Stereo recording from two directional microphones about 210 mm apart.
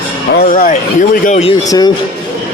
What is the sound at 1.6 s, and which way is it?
Speech, 20° left (ahead or behind).